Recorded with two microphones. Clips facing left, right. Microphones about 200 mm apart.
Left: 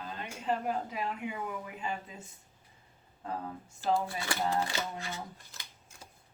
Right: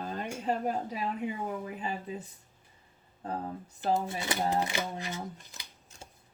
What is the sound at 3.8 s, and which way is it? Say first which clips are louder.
Speech: right 1 dB; 20° right (ahead or behind).